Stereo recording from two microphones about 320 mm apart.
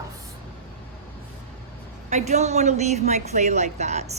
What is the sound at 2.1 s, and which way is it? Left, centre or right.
A woman's voice, right.